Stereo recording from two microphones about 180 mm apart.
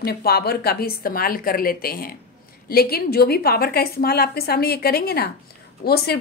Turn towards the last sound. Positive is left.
turn(degrees=60)  # may be behind; listen again after turning